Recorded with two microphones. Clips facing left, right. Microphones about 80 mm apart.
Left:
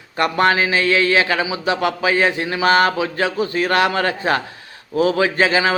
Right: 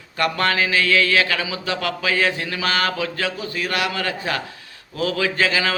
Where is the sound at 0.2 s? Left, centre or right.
Left.